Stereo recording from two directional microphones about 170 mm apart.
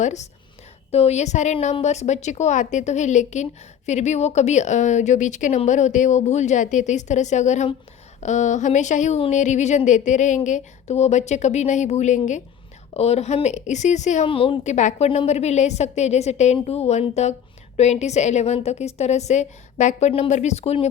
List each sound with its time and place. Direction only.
0.0 s a woman's voice: 45° left (ahead or behind)
14.3 s a woman's voice: 30° left (ahead or behind)